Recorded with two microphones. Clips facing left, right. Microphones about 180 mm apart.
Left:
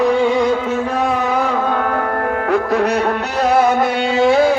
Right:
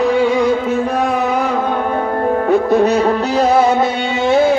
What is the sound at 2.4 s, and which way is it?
Music, 25° right (ahead or behind).